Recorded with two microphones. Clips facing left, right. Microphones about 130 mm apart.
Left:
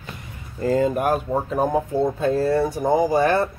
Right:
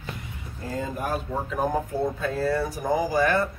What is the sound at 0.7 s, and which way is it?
Speech, 80° left.